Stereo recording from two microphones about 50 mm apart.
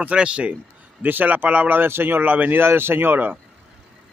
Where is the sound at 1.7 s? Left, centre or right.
Right.